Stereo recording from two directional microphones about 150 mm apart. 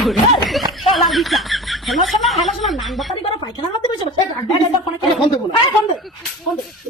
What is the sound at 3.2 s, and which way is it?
A woman's voice, 35° left (ahead or behind).